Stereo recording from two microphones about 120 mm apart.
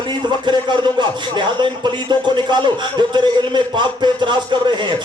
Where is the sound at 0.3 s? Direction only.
40° right (ahead or behind).